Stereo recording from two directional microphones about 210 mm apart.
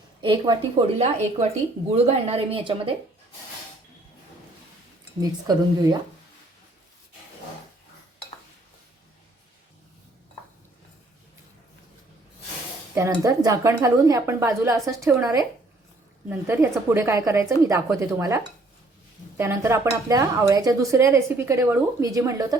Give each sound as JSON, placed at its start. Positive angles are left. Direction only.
{"t": 0.2, "sound": "a woman's voice", "side_deg": -20}
{"t": 5.2, "sound": "a woman's voice", "side_deg": -20}
{"t": 12.9, "sound": "speech", "side_deg": -10}